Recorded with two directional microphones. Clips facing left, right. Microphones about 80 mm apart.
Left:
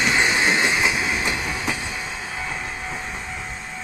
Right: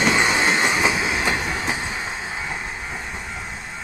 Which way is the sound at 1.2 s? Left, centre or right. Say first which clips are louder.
Right 2 dB; right.